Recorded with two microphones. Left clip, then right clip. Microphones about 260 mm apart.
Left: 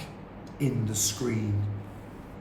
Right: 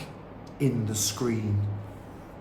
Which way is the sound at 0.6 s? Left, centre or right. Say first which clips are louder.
Right 1 dB; centre.